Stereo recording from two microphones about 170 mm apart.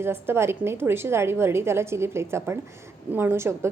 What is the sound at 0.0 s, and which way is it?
A woman's voice, 15° right (ahead or behind).